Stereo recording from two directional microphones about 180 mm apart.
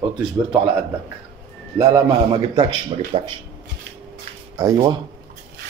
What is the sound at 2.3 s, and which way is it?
Speech, 25° right (ahead or behind).